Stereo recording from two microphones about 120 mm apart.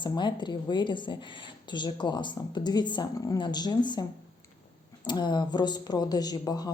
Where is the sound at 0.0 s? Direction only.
40° left (ahead or behind).